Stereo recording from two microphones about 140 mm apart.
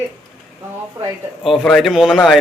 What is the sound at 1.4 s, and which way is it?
Speech, centre (ahead or behind).